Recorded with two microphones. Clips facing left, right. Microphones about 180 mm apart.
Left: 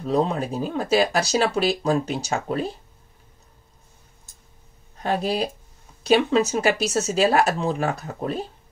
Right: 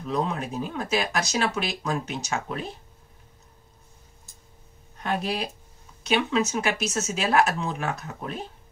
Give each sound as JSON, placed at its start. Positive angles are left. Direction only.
{"t": 0.0, "sound": "speech", "side_deg": 35}
{"t": 5.0, "sound": "speech", "side_deg": 35}